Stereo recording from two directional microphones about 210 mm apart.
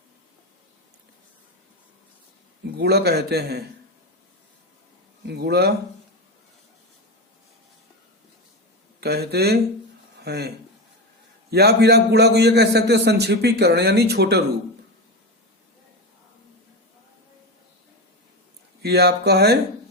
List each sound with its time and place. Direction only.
2.7 s a man's voice: 50° right (ahead or behind)
5.2 s speech: 50° right (ahead or behind)
9.0 s a man's voice: 50° right (ahead or behind)
11.5 s a man's voice: 50° right (ahead or behind)
18.8 s a man's voice: 50° right (ahead or behind)